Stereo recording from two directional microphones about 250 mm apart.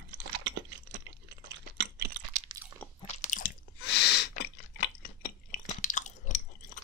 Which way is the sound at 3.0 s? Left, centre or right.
Left.